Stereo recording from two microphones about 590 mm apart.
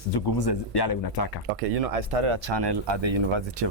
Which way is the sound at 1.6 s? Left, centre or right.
Right.